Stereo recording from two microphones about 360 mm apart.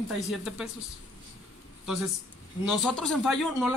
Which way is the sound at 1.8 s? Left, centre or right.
Centre.